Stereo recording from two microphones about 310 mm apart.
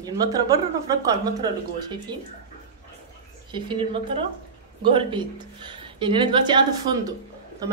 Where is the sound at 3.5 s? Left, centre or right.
Centre.